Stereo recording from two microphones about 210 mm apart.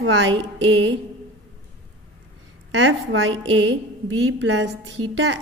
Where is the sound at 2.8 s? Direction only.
65° right (ahead or behind).